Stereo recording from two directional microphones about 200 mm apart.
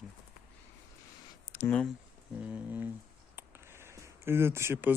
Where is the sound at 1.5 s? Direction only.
10° left (ahead or behind).